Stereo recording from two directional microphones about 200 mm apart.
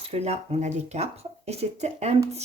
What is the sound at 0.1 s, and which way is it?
Speech, 30° right (ahead or behind).